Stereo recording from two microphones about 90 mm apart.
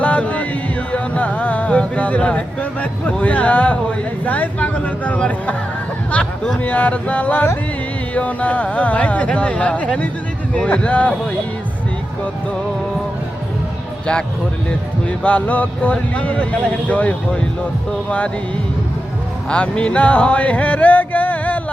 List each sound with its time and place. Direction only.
0.0 s music: 15° left (ahead or behind)
4.3 s speech: 15° left (ahead or behind)
15.0 s speech: 15° left (ahead or behind)
19.5 s speech: 10° left (ahead or behind)